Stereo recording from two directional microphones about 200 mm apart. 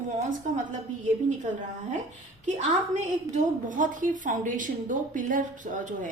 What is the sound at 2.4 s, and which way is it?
A woman's voice, 35° right (ahead or behind).